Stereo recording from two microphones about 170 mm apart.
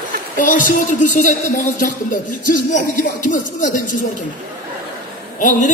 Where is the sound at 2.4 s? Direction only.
50° left (ahead or behind).